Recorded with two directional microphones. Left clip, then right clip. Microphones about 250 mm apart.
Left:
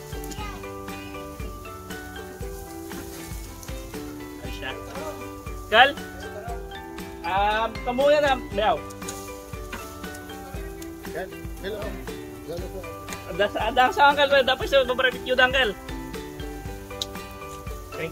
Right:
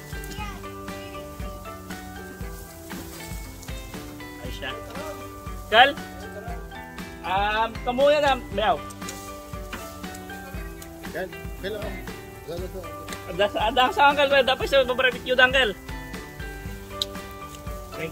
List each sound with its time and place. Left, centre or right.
5.7 s speech: centre
7.2 s speech: centre
13.4 s speech: centre